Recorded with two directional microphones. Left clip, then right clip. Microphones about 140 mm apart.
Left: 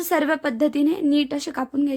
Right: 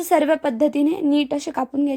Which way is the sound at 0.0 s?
15° right (ahead or behind).